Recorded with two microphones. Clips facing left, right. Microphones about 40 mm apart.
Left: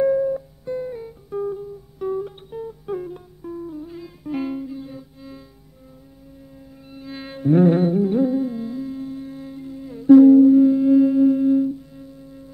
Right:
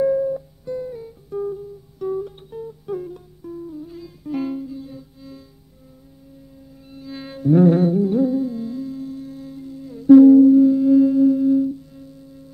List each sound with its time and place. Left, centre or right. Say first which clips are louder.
0.0 s music: even; left
6.9 s music: even; left
7.2 s carnatic music: right 1 dB; left
8.6 s music: even; left